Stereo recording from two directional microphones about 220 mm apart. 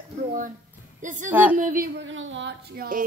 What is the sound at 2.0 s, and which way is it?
Speech, 60° right (ahead or behind).